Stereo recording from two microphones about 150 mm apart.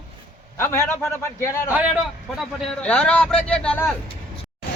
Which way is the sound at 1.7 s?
10° right (ahead or behind).